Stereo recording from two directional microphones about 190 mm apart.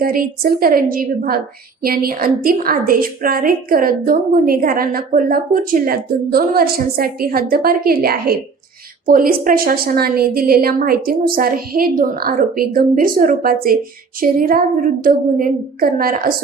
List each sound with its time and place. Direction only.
0.0 s a woman's voice: 50° right (ahead or behind)